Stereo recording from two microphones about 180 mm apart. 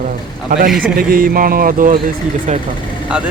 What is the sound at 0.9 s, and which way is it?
Speech, 55° right (ahead or behind).